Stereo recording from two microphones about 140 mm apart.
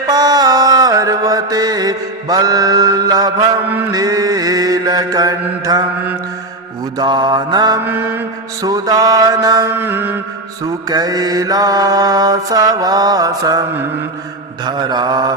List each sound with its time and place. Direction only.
0.1 s mantra: 25° right (ahead or behind)
7.0 s mantra: 30° right (ahead or behind)
7.8 s mantra: 15° right (ahead or behind)
8.6 s mantra: 25° right (ahead or behind)
9.7 s mantra: 15° right (ahead or behind)
10.8 s mantra: 30° right (ahead or behind)